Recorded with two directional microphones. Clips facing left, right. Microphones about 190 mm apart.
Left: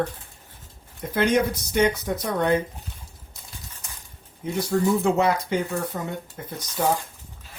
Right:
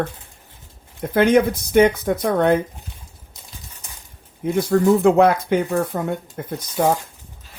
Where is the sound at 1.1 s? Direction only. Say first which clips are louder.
Right 6 dB; 55° right (ahead or behind).